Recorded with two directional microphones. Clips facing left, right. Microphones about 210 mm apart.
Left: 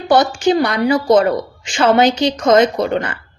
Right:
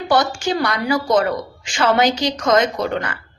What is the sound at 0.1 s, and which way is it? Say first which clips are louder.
A woman's voice: left 6 dB; 20° left (ahead or behind).